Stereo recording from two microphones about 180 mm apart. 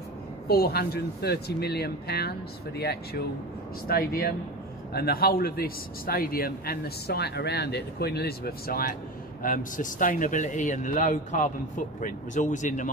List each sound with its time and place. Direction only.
0.5 s a man's voice: 60° left (ahead or behind); by 12.9 s 45° left (ahead or behind)